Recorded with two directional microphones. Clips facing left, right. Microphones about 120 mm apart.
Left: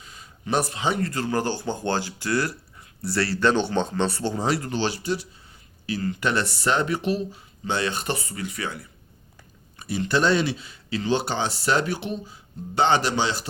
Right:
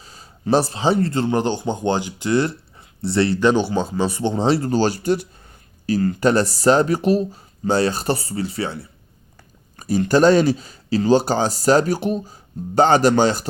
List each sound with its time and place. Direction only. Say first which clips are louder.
0.0 s speech: right 8 dB; 35° right (ahead or behind)
4.8 s speech: right 7 dB; 45° right (ahead or behind)
9.7 s speech: right 7 dB; 40° right (ahead or behind)